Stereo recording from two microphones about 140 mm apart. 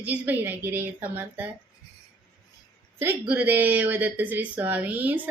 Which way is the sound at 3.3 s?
10° right (ahead or behind).